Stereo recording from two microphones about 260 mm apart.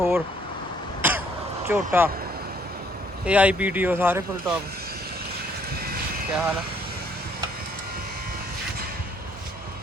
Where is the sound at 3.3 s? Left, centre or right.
Centre.